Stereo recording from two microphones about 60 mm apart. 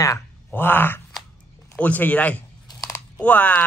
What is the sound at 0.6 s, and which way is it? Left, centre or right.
Speech, left.